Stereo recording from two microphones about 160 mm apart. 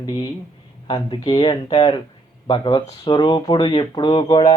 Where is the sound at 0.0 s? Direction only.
25° left (ahead or behind).